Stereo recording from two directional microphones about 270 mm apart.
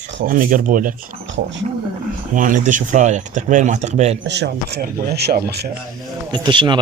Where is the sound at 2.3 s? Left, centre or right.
Right.